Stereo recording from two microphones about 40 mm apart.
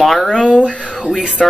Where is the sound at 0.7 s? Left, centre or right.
Left.